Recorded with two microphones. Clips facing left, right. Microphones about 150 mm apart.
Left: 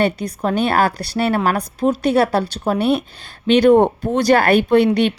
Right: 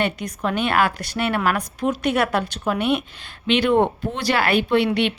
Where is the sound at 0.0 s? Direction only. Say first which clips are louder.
Left 5 dB; 35° left (ahead or behind).